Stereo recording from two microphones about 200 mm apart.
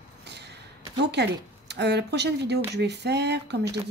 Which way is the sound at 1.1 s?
55° right (ahead or behind).